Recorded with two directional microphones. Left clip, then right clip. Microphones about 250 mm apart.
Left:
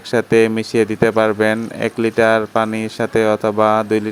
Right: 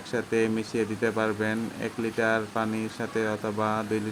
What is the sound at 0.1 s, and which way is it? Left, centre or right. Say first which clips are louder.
Speech: left 13 dB; left.